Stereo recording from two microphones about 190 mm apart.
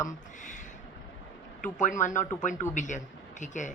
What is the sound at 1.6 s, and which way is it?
Speech, 40° left (ahead or behind).